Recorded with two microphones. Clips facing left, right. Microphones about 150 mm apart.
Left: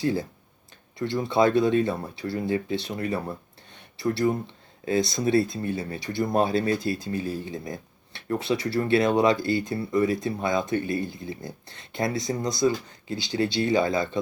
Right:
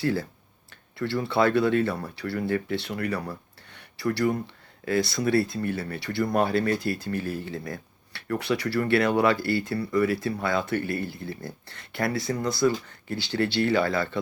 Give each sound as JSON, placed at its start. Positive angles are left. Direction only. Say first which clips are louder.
{"t": 0.0, "sound": "speech", "louder": "left 1 dB", "side_deg": 20}